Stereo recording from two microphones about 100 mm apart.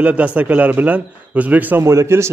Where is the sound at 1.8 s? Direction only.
30° right (ahead or behind).